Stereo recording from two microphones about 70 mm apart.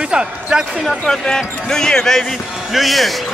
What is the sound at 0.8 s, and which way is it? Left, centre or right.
Speech, centre.